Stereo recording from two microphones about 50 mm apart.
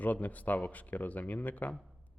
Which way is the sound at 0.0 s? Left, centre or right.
Left.